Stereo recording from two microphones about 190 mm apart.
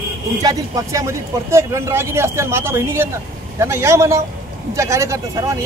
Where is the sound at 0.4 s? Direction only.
15° right (ahead or behind).